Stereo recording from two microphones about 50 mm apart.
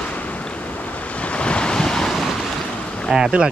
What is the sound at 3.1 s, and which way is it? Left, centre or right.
Speech, centre.